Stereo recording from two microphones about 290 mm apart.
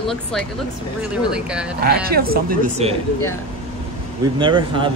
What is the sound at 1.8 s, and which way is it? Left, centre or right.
Speech, right.